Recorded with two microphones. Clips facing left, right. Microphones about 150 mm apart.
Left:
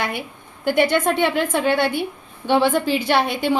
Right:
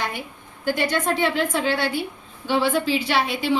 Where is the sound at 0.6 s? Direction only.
60° left (ahead or behind).